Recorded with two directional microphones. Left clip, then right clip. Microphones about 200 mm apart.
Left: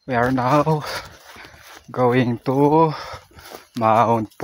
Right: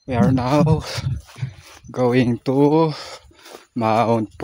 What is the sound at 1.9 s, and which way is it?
Speech, 25° right (ahead or behind).